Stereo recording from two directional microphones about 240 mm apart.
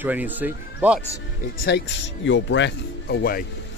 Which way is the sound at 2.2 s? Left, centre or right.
Left.